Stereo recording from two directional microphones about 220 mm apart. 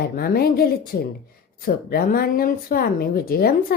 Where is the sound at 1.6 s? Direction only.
40° left (ahead or behind).